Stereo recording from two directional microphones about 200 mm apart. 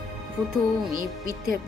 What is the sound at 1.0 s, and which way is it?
Speech, 45° right (ahead or behind).